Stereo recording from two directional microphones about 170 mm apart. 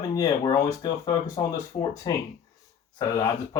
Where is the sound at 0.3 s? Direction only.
25° left (ahead or behind).